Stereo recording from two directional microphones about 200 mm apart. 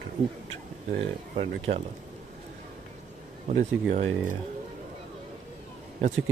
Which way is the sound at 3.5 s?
35° right (ahead or behind).